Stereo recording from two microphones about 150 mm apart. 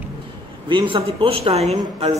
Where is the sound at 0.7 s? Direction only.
35° right (ahead or behind).